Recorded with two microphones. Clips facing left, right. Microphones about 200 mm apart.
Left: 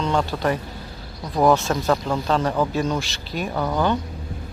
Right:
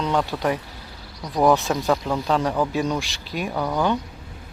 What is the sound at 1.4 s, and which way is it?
Speech, 15° right (ahead or behind).